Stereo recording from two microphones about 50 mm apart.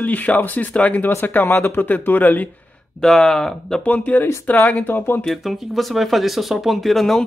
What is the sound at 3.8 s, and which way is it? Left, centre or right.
Speech, left.